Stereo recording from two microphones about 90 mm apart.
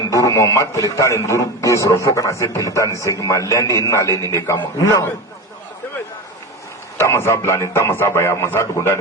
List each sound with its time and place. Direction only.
0.1 s a man's voice: 40° left (ahead or behind)
6.9 s a man's voice: 30° left (ahead or behind)